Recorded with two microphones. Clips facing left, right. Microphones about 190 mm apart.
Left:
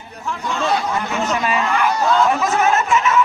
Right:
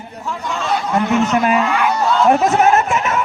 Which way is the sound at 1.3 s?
55° right (ahead or behind).